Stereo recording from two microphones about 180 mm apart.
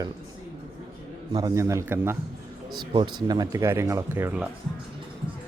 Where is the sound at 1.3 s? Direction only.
20° right (ahead or behind).